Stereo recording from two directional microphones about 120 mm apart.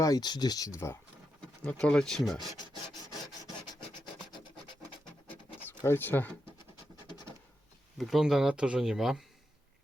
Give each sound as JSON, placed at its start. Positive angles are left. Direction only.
{"t": 0.0, "sound": "speech", "side_deg": 35}
{"t": 1.6, "sound": "speech", "side_deg": 10}
{"t": 5.6, "sound": "speech", "side_deg": 20}
{"t": 7.9, "sound": "speech", "side_deg": 0}